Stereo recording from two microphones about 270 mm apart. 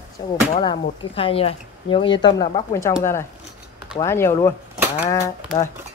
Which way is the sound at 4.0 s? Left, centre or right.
Centre.